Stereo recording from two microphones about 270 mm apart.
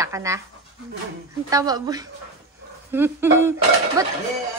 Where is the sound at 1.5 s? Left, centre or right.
Centre.